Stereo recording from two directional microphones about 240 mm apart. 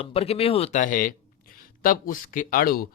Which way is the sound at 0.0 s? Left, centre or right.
Left.